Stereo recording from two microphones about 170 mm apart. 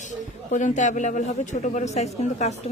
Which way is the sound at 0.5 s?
45° left (ahead or behind).